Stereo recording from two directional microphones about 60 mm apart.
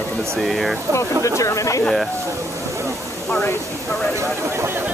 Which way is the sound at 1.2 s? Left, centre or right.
Left.